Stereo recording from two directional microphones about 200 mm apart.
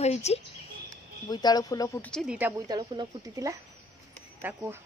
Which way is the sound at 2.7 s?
20° right (ahead or behind).